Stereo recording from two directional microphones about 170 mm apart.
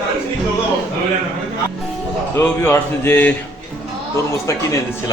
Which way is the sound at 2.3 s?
15° left (ahead or behind).